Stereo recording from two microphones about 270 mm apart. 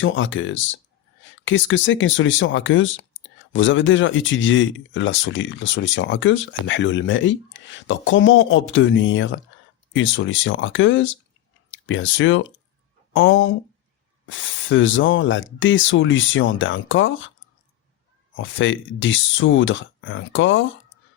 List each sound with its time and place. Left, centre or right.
0.0 s speech: left
18.3 s speech: left